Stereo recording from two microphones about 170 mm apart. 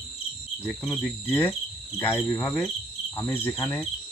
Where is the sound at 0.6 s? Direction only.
Centre (ahead or behind).